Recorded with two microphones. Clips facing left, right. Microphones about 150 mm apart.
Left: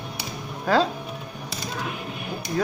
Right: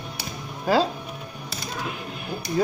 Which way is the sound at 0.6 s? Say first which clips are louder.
Even; 5° right (ahead or behind).